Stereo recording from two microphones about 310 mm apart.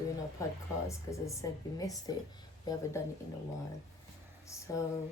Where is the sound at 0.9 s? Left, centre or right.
Centre.